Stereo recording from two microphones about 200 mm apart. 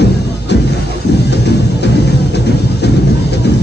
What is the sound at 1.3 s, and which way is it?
Music, 60° left (ahead or behind).